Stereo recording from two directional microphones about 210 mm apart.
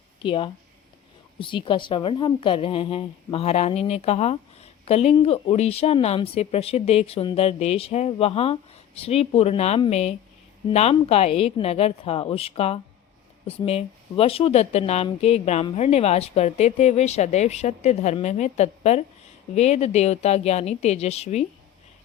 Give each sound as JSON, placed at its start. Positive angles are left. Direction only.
{"t": 0.2, "sound": "a woman's voice", "side_deg": 25}